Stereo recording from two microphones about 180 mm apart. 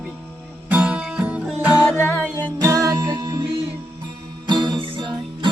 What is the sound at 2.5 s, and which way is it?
Music, 20° right (ahead or behind).